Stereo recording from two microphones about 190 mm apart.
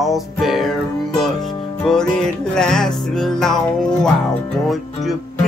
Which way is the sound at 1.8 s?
5° left (ahead or behind).